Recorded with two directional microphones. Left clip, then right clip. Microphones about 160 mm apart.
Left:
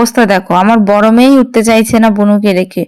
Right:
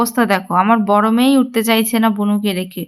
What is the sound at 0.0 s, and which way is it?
A woman's voice, 35° left (ahead or behind).